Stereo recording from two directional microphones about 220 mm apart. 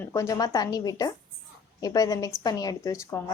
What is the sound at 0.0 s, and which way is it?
A woman's voice, 15° left (ahead or behind).